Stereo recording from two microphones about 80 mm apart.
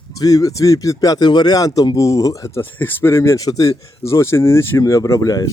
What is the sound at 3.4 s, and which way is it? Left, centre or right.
Speech, left.